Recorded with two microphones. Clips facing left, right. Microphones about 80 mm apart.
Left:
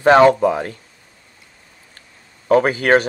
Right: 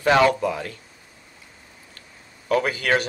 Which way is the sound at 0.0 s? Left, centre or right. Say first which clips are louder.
Left 7 dB; left.